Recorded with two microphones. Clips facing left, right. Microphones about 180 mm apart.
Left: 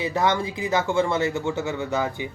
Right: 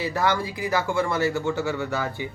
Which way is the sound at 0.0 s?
20° left (ahead or behind).